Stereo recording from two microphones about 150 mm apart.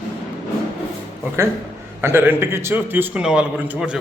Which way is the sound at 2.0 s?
15° right (ahead or behind).